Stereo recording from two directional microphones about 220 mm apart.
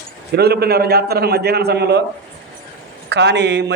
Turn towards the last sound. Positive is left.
turn(degrees=-50)  # may be behind; listen again after turning